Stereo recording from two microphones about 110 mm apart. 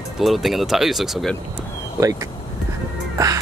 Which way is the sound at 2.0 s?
30° right (ahead or behind).